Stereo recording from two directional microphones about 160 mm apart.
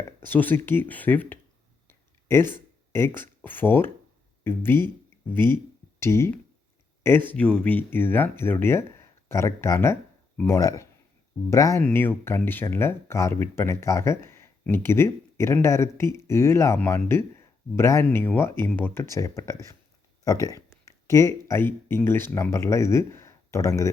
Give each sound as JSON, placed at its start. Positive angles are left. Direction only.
{"t": 0.2, "sound": "speech", "side_deg": 10}
{"t": 1.9, "sound": "a sound", "side_deg": 15}
{"t": 4.4, "sound": "speech", "side_deg": 15}
{"t": 11.8, "sound": "speech", "side_deg": 10}